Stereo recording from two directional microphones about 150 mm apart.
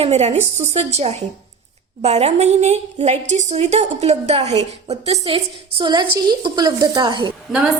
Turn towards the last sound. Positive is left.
turn(degrees=-5)  # may be behind; listen again after turning